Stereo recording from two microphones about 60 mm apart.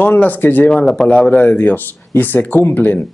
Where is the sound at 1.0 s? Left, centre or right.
Centre.